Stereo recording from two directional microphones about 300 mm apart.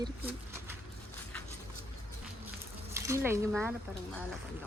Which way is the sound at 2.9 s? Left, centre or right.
Centre.